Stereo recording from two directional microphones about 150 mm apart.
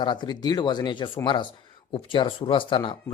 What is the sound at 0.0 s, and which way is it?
Speech, 30° left (ahead or behind).